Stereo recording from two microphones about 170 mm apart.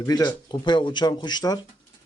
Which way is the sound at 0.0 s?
25° left (ahead or behind).